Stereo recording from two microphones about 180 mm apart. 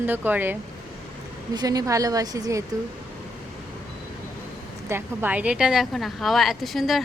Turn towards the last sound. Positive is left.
turn(degrees=0)  # may be behind; listen again after turning